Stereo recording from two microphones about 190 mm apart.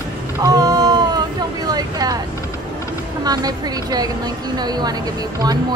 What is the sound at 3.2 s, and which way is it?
Speech, 20° right (ahead or behind).